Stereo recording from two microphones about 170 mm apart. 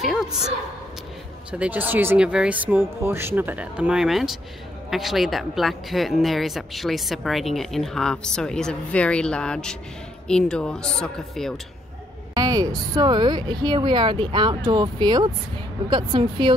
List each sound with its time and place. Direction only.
0.0 s a sound: centre (ahead or behind)
1.5 s speech: 10° right (ahead or behind)
12.4 s speech: 20° right (ahead or behind)